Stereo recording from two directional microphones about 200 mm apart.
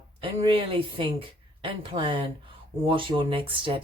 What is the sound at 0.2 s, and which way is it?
Speech, 25° right (ahead or behind).